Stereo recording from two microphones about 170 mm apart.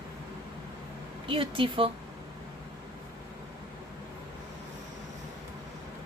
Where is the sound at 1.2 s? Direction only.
30° right (ahead or behind).